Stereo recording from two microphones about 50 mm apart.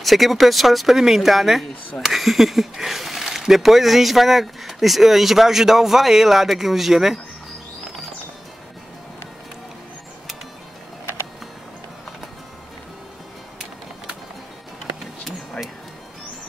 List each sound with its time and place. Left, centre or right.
0.0 s speech: centre